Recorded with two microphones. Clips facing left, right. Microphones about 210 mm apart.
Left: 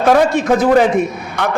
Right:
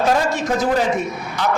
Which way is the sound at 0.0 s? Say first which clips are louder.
Left 6 dB; 60° left (ahead or behind).